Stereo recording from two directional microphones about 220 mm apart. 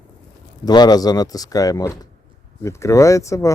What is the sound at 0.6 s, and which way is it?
Speech, 20° left (ahead or behind).